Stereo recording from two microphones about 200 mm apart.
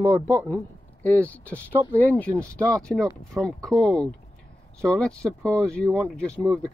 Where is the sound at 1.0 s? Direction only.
10° left (ahead or behind).